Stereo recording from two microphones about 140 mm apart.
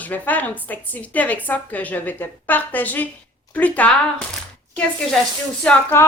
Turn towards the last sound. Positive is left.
turn(degrees=15)  # may be behind; listen again after turning